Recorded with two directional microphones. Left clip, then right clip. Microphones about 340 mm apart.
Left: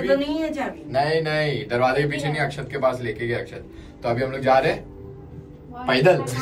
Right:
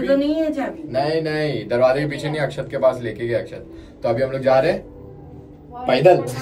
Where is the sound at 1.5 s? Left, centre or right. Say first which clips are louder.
Right 4 dB; left.